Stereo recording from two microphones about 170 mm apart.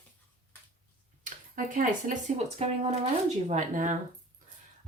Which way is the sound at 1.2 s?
50° right (ahead or behind).